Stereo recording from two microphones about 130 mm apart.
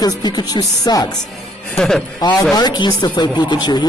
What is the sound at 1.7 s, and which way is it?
Speech, 5° left (ahead or behind).